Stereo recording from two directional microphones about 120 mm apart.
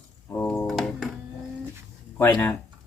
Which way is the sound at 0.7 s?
Centre (ahead or behind).